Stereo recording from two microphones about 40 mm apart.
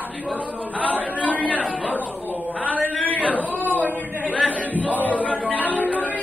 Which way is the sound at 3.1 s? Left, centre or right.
Left.